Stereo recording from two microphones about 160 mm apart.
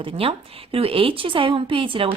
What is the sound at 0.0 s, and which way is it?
A woman's voice, 35° right (ahead or behind).